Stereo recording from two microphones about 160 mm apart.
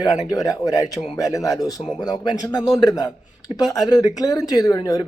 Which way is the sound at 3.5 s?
25° left (ahead or behind).